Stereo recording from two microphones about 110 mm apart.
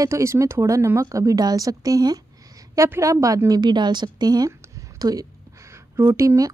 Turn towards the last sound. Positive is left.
turn(degrees=-30)  # may be behind; listen again after turning